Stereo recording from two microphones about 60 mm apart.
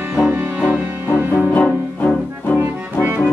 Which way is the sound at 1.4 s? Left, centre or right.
Left.